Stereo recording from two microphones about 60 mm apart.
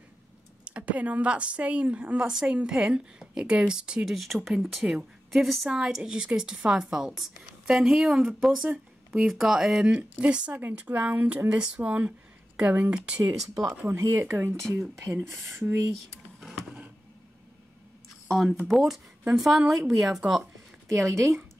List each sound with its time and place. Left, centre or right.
0.7 s a woman's voice: right
4.1 s a woman's voice: centre
9.9 s a woman's voice: centre
13.3 s speech: right
14.2 s speech: right
14.7 s speech: right
16.3 s a sound: centre
18.3 s speech: centre
20.9 s speech: right